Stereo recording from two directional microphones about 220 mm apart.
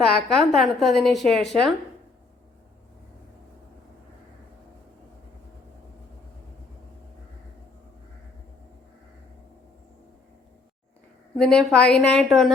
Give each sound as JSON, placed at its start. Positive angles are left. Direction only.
{"t": 0.0, "sound": "a woman's voice", "side_deg": 0}
{"t": 11.3, "sound": "a woman's voice", "side_deg": 0}